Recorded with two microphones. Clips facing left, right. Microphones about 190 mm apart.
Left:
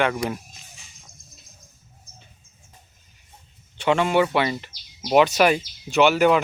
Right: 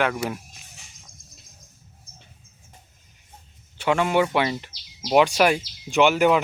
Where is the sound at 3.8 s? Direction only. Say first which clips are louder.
Left 1 dB; 5° right (ahead or behind).